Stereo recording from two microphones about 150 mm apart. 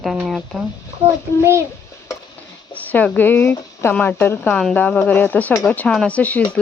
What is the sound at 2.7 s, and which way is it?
Speech, 10° left (ahead or behind).